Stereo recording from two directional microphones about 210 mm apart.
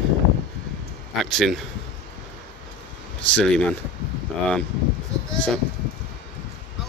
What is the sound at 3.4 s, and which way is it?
Speech, 5° left (ahead or behind).